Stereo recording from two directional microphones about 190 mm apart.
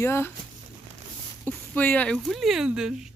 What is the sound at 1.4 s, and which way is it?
Speech, 10° left (ahead or behind).